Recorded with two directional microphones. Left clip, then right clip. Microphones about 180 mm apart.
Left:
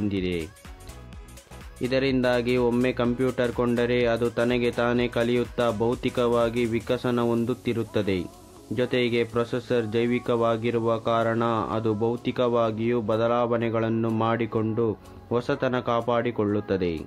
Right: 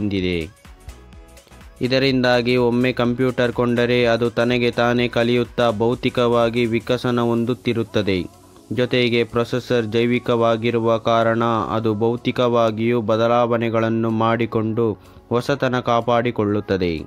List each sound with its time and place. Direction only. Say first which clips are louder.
0.1 s speech: right 6 dB; 35° right (ahead or behind)
1.8 s speech: right 6 dB; 35° right (ahead or behind)